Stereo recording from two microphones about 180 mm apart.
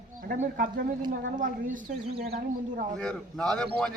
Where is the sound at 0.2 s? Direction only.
55° right (ahead or behind).